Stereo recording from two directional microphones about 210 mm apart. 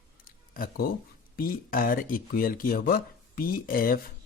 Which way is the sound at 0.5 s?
45° left (ahead or behind).